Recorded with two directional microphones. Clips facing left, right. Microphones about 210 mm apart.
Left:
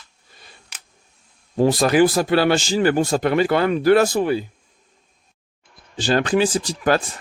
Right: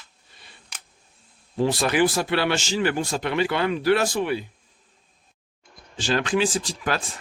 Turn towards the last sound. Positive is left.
turn(degrees=40)  # may be behind; listen again after turning